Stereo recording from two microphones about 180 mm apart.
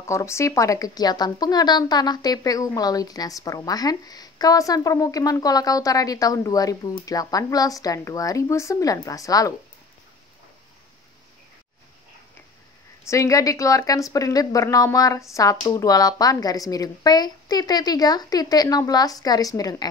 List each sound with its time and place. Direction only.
0.0 s speech: 15° left (ahead or behind)
13.1 s speech: 15° left (ahead or behind)